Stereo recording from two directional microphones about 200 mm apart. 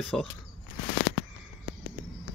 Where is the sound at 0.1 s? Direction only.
5° left (ahead or behind).